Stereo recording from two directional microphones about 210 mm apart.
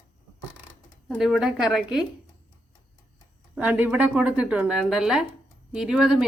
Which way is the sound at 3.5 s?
10° right (ahead or behind).